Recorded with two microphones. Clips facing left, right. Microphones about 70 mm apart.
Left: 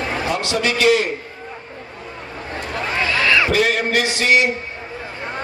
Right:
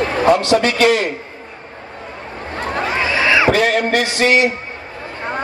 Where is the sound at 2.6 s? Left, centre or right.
Right.